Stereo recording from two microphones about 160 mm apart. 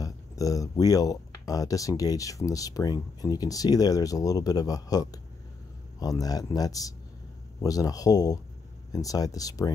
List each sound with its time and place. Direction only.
0.0 s speech: 20° left (ahead or behind)